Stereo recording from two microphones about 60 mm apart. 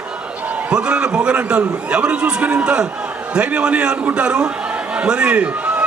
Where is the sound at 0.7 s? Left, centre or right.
Centre.